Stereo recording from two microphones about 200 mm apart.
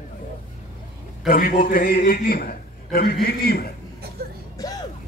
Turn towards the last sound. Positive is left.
turn(degrees=20)  # may be behind; listen again after turning